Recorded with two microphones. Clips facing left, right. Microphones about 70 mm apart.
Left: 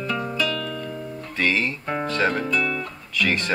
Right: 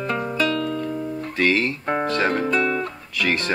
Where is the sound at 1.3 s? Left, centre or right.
Centre.